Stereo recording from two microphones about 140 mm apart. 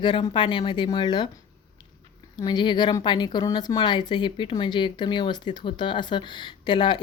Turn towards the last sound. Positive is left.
turn(degrees=35)  # may be behind; listen again after turning